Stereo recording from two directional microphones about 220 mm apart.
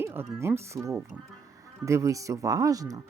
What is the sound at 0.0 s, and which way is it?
Speech, 10° right (ahead or behind).